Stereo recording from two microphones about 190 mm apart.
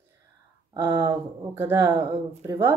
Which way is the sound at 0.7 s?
15° right (ahead or behind).